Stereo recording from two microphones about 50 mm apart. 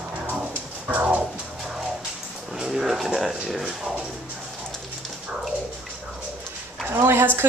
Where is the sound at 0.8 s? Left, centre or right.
Right.